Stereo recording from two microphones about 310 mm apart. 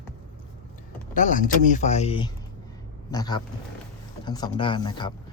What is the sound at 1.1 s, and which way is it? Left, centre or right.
Speech, left.